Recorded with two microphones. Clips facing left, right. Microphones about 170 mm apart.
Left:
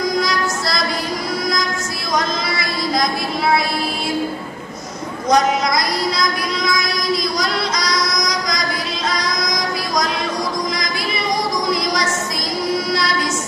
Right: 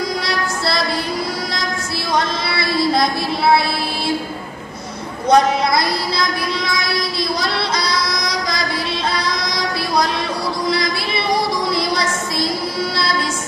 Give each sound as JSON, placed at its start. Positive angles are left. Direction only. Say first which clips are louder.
{"t": 0.2, "sound": "music", "louder": "left 1 dB", "side_deg": -30}
{"t": 2.1, "sound": "a sound", "louder": "even", "side_deg": -30}
{"t": 5.3, "sound": "music", "louder": "right 2 dB", "side_deg": -30}
{"t": 7.3, "sound": "female singing", "louder": "even", "side_deg": -30}